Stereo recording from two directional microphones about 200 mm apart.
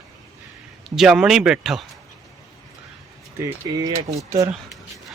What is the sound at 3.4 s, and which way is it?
Speech, 20° right (ahead or behind).